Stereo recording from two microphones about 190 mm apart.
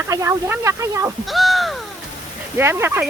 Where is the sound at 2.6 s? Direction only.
15° right (ahead or behind).